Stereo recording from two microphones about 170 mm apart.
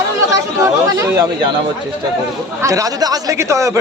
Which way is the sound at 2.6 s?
20° right (ahead or behind).